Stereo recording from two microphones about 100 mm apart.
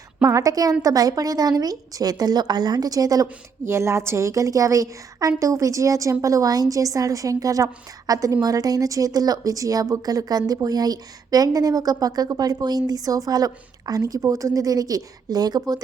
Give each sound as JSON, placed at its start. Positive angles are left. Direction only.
{"t": 0.2, "sound": "a woman's voice", "side_deg": -30}
{"t": 3.7, "sound": "a woman's voice", "side_deg": -25}